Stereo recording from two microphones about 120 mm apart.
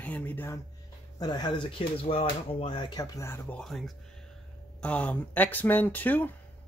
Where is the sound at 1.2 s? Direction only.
35° left (ahead or behind).